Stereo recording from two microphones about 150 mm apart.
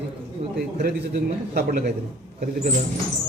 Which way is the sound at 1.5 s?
80° right.